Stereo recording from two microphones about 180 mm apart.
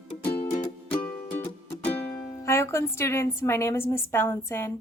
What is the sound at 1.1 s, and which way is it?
Music, 50° left (ahead or behind).